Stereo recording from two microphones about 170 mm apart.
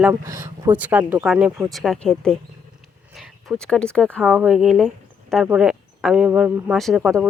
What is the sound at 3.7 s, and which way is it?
Speech, 5° left (ahead or behind).